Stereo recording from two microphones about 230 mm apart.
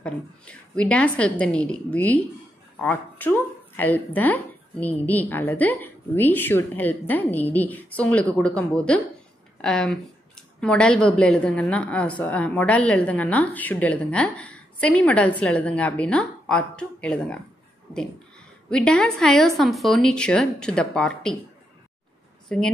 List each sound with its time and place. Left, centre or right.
0.0 s speech: centre
18.7 s speech: centre
22.5 s speech: centre